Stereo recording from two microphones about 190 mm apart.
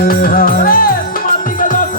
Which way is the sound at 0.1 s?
50° left (ahead or behind).